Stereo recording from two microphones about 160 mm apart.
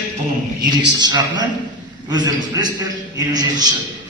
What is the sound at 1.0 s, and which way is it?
Speech, 25° right (ahead or behind).